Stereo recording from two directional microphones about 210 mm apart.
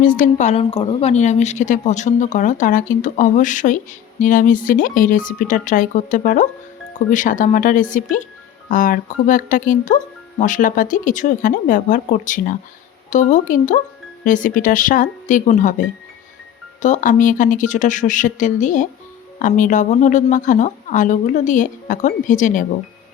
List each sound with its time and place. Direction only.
0.2 s speech: 35° left (ahead or behind)
16.8 s speech: 35° left (ahead or behind)